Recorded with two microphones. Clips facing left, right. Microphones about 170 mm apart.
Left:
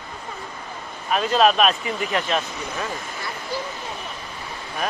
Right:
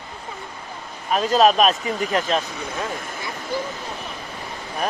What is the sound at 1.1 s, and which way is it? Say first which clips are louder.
Speech: right 2 dB; 40° right (ahead or behind).